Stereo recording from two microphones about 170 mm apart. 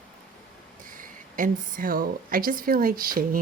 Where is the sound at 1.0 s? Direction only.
50° right (ahead or behind).